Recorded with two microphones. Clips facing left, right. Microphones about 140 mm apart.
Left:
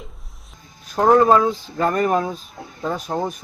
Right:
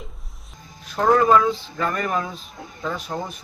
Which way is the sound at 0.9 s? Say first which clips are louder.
Left 3 dB; 25° left (ahead or behind).